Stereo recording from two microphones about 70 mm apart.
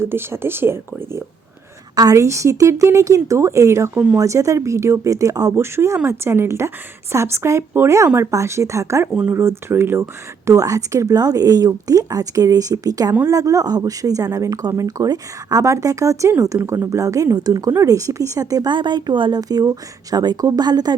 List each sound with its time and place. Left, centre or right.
0.0 s speech: right
2.0 s speech: right
5.5 s speech: right
17.3 s speech: right
17.7 s speech: right